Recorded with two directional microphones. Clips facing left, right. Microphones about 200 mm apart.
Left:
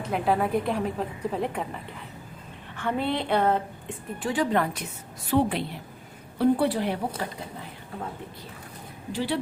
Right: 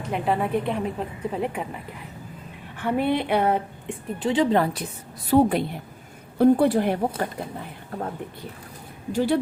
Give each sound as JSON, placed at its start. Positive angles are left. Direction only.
{"t": 0.1, "sound": "a woman's voice", "side_deg": 0}
{"t": 2.7, "sound": "a sound", "side_deg": -15}
{"t": 3.8, "sound": "a woman's voice", "side_deg": -20}
{"t": 5.3, "sound": "a woman's voice", "side_deg": -45}
{"t": 9.1, "sound": "a woman's voice", "side_deg": -45}